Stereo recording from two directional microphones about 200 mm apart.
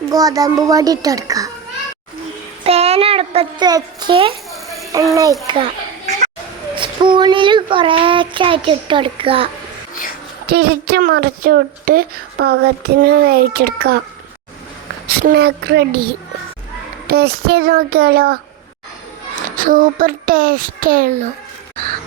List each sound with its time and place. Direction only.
0.1 s a child's voice: 20° right (ahead or behind)
2.6 s a sound: 30° right (ahead or behind)
5.1 s a child's voice: 15° right (ahead or behind)
5.5 s children playing: 25° right (ahead or behind)
6.7 s speech: 25° right (ahead or behind)
9.9 s a sound: 45° left (ahead or behind)
10.4 s a woman's voice: 50° right (ahead or behind)
15.0 s a woman's voice: 45° right (ahead or behind)
17.1 s a woman's voice: 50° right (ahead or behind)
19.4 s a woman's voice: 45° right (ahead or behind)